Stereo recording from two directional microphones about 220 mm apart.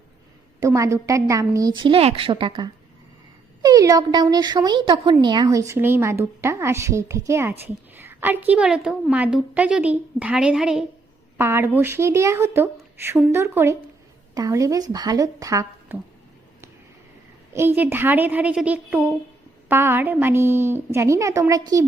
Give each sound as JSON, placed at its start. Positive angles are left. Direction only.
{"t": 0.6, "sound": "a woman's voice", "side_deg": -15}
{"t": 17.5, "sound": "speech", "side_deg": -10}